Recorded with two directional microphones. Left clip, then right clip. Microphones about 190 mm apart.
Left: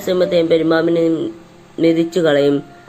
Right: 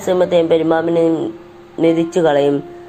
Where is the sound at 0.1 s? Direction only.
20° left (ahead or behind).